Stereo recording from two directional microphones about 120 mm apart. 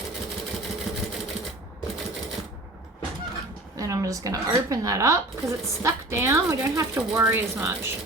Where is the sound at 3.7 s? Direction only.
25° right (ahead or behind).